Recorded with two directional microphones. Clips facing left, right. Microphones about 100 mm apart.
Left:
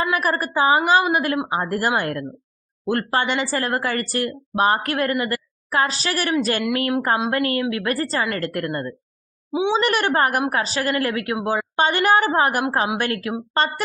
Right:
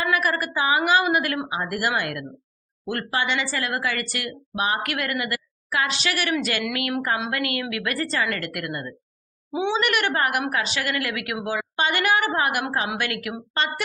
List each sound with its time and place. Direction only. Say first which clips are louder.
0.0 s a woman's voice: left 2 dB; 30° left (ahead or behind)
9.5 s a woman's voice: left 3 dB; 15° left (ahead or behind)
9.7 s speech: left 4 dB; 30° left (ahead or behind)